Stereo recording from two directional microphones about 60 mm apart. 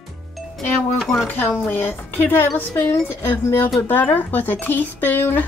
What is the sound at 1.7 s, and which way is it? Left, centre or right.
Speech, left.